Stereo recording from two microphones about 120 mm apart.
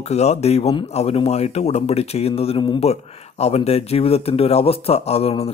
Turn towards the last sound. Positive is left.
turn(degrees=55)  # may be behind; listen again after turning